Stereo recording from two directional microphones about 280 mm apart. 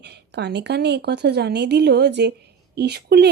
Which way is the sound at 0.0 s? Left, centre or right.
Right.